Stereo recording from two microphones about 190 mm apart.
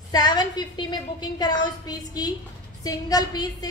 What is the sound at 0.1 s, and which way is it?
A woman's voice, 20° left (ahead or behind).